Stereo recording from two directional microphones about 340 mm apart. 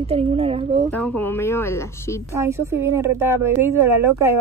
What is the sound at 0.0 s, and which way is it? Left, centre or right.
Speech, centre.